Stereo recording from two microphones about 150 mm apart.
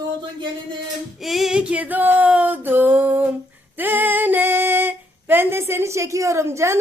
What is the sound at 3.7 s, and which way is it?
Female singing, 10° right (ahead or behind).